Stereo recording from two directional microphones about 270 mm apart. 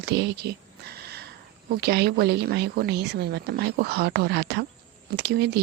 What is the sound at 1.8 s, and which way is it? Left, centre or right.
Speech, right.